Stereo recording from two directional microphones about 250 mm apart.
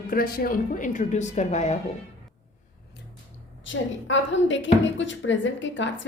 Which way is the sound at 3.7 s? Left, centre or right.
Left.